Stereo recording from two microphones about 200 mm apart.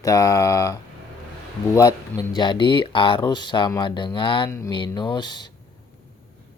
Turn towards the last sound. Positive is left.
turn(degrees=20)  # may be behind; listen again after turning